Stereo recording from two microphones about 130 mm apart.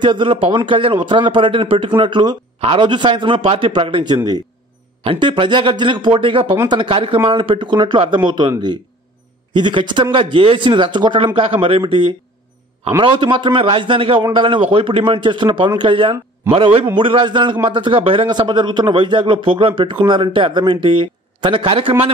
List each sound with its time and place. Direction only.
0.0 s a man's voice: 40° right (ahead or behind)
13.0 s a man's voice: 40° right (ahead or behind)